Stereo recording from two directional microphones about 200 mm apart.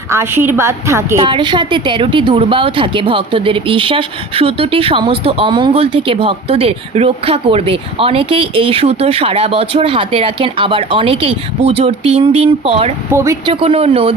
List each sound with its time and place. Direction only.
0.1 s a woman's voice: 10° right (ahead or behind); by 12.9 s 30° right (ahead or behind)
13.1 s a woman's voice: 15° right (ahead or behind)
13.5 s a woman's voice: 25° right (ahead or behind)